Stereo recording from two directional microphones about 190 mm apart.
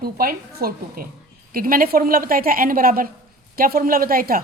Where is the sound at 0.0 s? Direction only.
50° right (ahead or behind).